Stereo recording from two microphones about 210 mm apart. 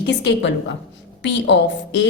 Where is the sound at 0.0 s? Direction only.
55° left (ahead or behind).